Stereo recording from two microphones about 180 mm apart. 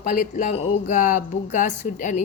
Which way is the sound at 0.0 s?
45° left (ahead or behind).